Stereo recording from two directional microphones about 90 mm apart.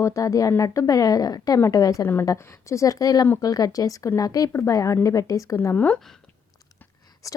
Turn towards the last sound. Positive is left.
turn(degrees=15)  # may be behind; listen again after turning